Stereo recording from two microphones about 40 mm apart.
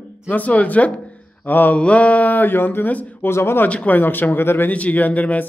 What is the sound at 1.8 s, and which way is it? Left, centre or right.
Mantra, left.